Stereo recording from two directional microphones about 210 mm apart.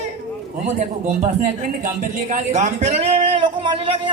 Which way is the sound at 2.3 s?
35° right (ahead or behind).